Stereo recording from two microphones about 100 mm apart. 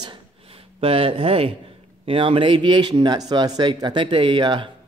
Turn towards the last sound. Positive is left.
turn(degrees=-55)  # may be behind; listen again after turning